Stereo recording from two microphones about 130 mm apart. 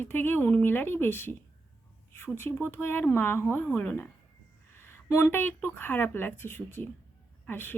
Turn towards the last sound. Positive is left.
turn(degrees=15)  # may be behind; listen again after turning